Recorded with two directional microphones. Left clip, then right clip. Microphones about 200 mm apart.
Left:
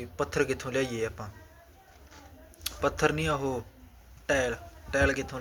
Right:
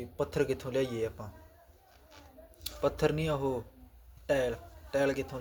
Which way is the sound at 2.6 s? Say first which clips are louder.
Left 3 dB; 5° right (ahead or behind).